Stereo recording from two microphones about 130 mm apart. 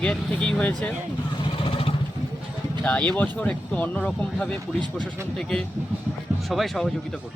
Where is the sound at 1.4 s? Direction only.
40° left (ahead or behind).